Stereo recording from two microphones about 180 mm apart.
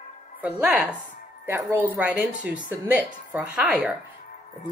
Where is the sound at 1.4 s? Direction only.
15° right (ahead or behind).